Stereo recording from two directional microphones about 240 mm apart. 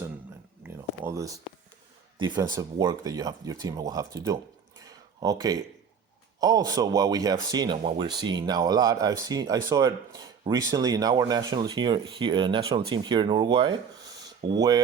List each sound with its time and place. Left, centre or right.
1.0 s speech: centre
4.9 s a sound: centre
6.4 s speech: centre